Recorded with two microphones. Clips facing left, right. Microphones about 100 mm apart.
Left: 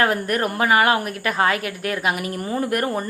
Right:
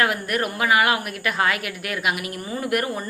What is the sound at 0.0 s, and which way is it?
A woman's voice, 35° left (ahead or behind).